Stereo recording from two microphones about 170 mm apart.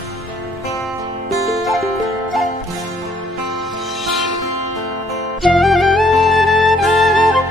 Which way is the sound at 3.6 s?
Centre (ahead or behind).